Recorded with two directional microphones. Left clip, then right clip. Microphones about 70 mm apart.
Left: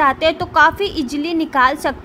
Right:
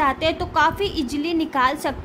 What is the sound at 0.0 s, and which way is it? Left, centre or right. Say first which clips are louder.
A woman's voice: left 5 dB; left.